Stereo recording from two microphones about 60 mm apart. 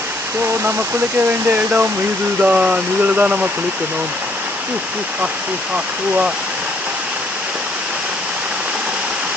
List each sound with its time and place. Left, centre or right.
0.4 s speech: right
1.3 s speech: right
5.7 s speech: centre